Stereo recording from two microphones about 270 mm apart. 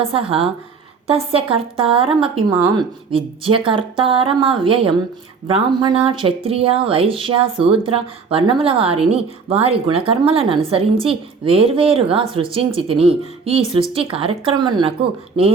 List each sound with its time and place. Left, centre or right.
0.0 s speech: centre